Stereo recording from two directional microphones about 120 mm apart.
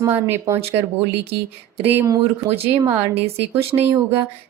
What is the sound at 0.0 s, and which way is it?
Speech, 20° right (ahead or behind).